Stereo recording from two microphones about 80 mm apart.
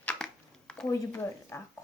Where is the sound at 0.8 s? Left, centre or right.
Left.